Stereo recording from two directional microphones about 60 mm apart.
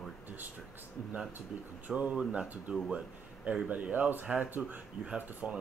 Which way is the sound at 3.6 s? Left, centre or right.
Right.